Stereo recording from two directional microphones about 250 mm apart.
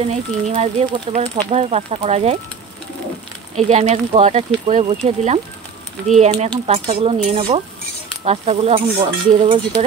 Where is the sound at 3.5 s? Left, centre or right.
Right.